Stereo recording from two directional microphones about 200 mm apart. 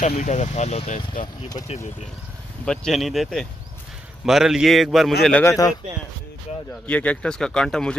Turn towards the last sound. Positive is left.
turn(degrees=5)  # may be behind; listen again after turning